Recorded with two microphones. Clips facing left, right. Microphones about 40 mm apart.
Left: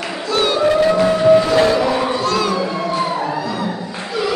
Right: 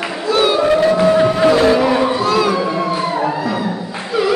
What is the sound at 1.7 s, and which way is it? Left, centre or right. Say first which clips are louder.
Music: right 3 dB; centre.